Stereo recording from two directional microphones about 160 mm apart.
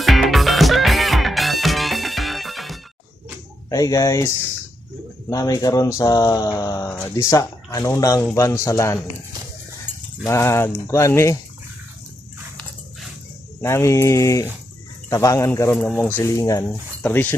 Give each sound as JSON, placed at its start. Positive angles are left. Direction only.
{"t": 0.0, "sound": "music", "side_deg": 0}
{"t": 3.7, "sound": "mantra", "side_deg": 20}
{"t": 5.3, "sound": "mantra", "side_deg": 20}
{"t": 10.2, "sound": "speech", "side_deg": 15}
{"t": 13.6, "sound": "speech", "side_deg": 15}
{"t": 16.2, "sound": "mantra", "side_deg": 20}
{"t": 17.0, "sound": "speech", "side_deg": 10}